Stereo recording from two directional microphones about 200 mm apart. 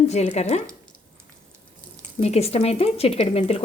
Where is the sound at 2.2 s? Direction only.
30° left (ahead or behind).